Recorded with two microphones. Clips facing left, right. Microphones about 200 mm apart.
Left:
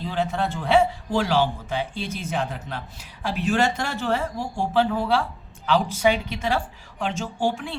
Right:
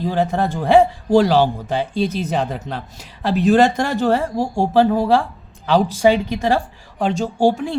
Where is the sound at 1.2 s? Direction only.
35° right (ahead or behind).